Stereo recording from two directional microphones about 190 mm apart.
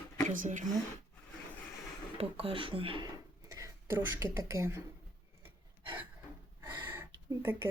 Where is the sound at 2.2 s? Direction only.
30° right (ahead or behind).